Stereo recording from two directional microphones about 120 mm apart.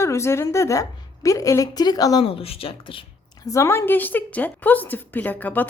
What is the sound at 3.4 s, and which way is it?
A woman's voice, 25° left (ahead or behind).